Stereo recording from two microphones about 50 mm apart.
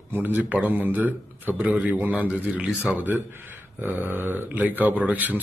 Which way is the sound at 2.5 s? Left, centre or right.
Right.